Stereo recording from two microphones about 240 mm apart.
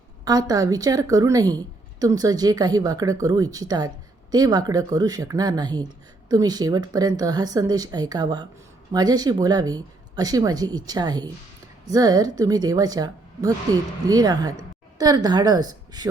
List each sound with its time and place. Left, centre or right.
0.3 s speech: centre